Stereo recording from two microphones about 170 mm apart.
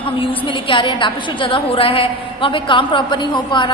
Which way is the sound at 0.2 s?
30° left (ahead or behind).